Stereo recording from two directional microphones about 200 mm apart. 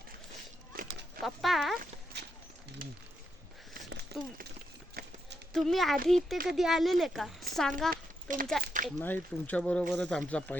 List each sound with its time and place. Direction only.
0.7 s a sound: 45° right (ahead or behind)
1.2 s speech: centre (ahead or behind)
2.1 s clip-clop: 55° right (ahead or behind)
4.1 s a sound: 55° right (ahead or behind)
5.0 s run: 45° right (ahead or behind)
5.5 s speech: centre (ahead or behind)
6.3 s speech: 45° right (ahead or behind)
6.6 s speech: centre (ahead or behind)
7.9 s a sound: 45° right (ahead or behind)
9.0 s speech: 10° left (ahead or behind)